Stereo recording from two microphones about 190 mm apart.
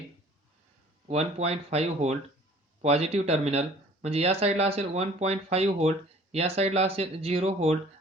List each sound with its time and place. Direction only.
1.0 s speech: 35° right (ahead or behind)